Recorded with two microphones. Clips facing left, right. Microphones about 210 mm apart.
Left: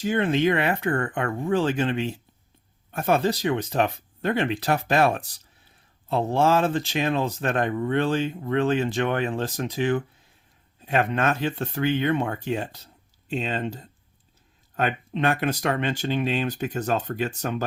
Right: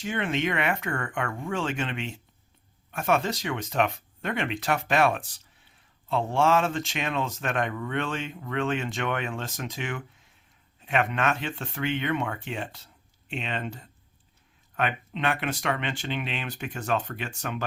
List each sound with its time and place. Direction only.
0.0 s speech: 35° left (ahead or behind)